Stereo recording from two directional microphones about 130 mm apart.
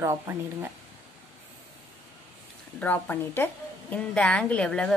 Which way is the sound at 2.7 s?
15° left (ahead or behind).